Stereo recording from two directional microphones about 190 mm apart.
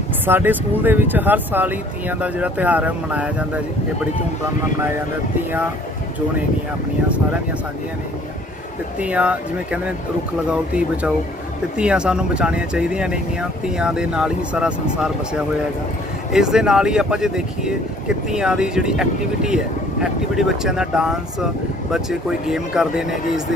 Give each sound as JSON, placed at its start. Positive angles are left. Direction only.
{"t": 0.3, "sound": "speech", "side_deg": -10}
{"t": 9.0, "sound": "speech", "side_deg": -5}